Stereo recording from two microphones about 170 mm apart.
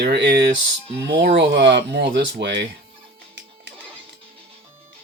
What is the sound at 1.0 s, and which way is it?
Speech, 70° right (ahead or behind).